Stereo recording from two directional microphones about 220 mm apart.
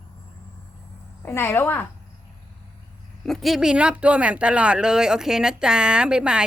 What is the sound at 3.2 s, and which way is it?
Speech, centre (ahead or behind).